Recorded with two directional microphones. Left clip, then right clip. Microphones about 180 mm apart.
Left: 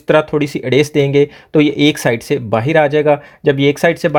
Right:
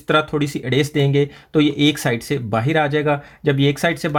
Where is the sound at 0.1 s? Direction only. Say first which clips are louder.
Left 5 dB; 30° left (ahead or behind).